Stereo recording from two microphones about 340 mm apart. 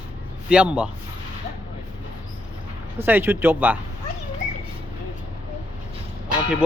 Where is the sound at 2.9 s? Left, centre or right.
Centre.